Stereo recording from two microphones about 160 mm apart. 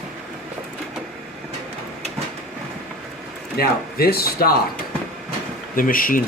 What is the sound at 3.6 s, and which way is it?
Speech, 70° left (ahead or behind).